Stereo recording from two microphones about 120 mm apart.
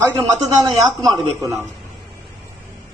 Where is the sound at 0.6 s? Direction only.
Centre (ahead or behind).